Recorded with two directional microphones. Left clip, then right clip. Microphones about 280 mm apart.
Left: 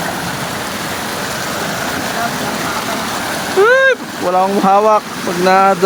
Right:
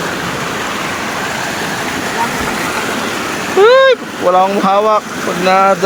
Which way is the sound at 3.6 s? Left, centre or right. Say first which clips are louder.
Right 3 dB; centre.